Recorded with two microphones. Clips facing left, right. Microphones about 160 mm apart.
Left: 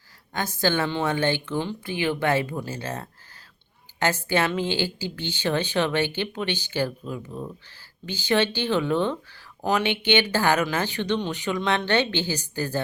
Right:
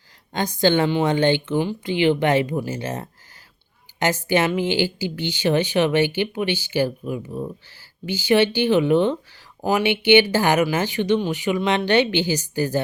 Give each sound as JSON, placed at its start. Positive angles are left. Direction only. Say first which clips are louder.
{"t": 0.3, "sound": "speech", "louder": "right 6 dB", "side_deg": -20}